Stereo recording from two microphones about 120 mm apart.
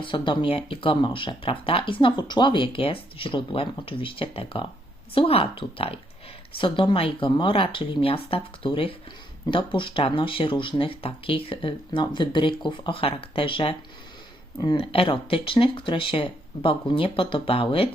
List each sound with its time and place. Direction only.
0.0 s speech: 45° left (ahead or behind)
14.8 s speech: 50° left (ahead or behind)